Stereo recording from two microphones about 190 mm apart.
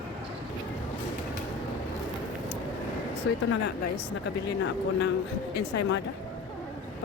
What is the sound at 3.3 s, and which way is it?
Speech, 65° left (ahead or behind).